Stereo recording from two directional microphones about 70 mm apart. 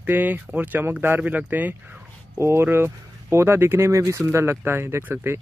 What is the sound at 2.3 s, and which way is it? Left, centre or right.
A man's voice, right.